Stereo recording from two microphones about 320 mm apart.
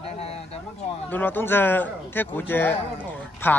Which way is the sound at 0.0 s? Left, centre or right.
Centre.